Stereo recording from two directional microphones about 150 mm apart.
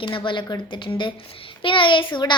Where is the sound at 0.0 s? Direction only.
35° left (ahead or behind).